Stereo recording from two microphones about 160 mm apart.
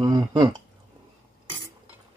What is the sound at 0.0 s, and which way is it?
Speech, 25° right (ahead or behind).